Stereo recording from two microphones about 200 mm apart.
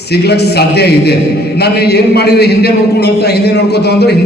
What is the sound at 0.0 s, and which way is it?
A man's voice, 55° left (ahead or behind).